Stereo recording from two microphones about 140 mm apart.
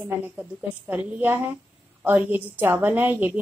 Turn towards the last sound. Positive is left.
turn(degrees=-15)  # may be behind; listen again after turning